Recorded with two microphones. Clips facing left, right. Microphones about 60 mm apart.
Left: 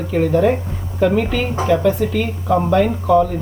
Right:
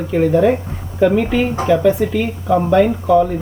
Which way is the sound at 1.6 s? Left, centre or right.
Centre.